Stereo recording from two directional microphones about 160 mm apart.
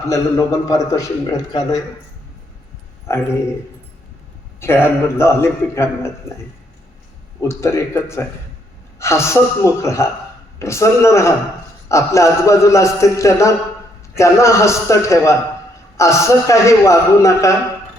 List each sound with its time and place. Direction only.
0.1 s a man's voice: 20° left (ahead or behind)
3.1 s a man's voice: 15° left (ahead or behind)
4.6 s a man's voice: 15° left (ahead or behind)
7.4 s a man's voice: 15° left (ahead or behind)